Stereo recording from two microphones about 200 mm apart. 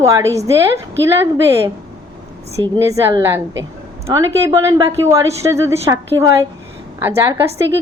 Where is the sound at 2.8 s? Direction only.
15° right (ahead or behind).